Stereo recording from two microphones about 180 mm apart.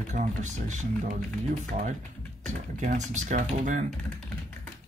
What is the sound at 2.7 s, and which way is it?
Speech, 40° right (ahead or behind).